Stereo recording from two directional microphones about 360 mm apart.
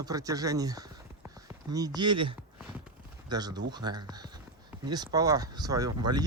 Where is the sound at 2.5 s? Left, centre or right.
Centre.